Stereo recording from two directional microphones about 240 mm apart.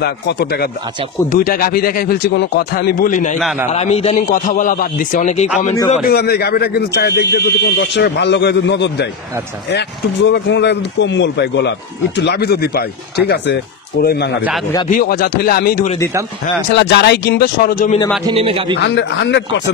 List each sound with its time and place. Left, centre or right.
0.0 s a man's voice: left
3.3 s a man's voice: centre
3.7 s a man's voice: left
18.2 s speech: right
18.8 s speech: left